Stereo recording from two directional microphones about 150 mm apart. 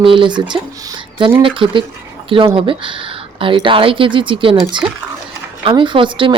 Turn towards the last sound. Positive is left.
turn(degrees=-35)  # may be behind; listen again after turning